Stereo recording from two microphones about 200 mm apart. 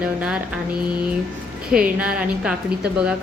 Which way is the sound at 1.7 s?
5° right (ahead or behind).